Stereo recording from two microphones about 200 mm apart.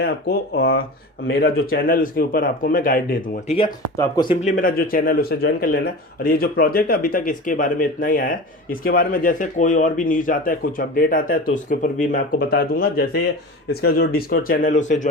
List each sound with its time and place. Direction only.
0.0 s speech: 50° left (ahead or behind)
3.9 s speech: 15° left (ahead or behind)
4.4 s speech: 40° left (ahead or behind)